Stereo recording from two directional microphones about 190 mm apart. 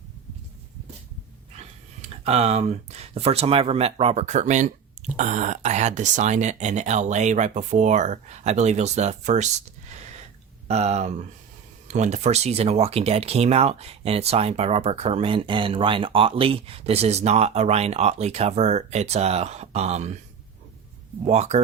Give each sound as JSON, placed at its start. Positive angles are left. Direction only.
{"t": 1.5, "sound": "speech", "side_deg": -35}
{"t": 10.7, "sound": "speech", "side_deg": -35}
{"t": 21.2, "sound": "speech", "side_deg": -35}